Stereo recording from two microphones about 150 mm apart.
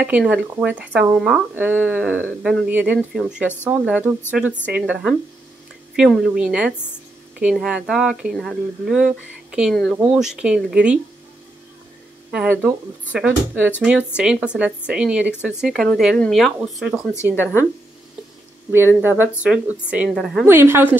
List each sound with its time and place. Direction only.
0.2 s speech: centre (ahead or behind)
12.3 s speech: 10° right (ahead or behind)
17.2 s speech: 15° left (ahead or behind)
18.7 s speech: 15° right (ahead or behind)